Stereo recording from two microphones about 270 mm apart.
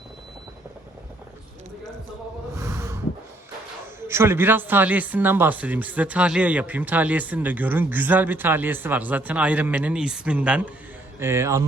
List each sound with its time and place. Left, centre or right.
2.6 s snort: centre
4.0 s speech: centre